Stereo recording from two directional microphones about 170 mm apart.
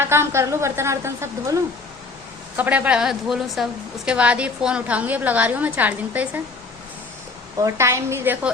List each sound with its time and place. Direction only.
0.0 s a woman's voice: 15° right (ahead or behind)
2.6 s a woman's voice: 10° right (ahead or behind)
7.6 s a woman's voice: 15° right (ahead or behind)